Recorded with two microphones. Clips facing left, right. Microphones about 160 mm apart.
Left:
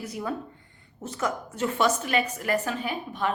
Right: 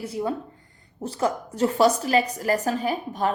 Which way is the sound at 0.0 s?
30° right (ahead or behind).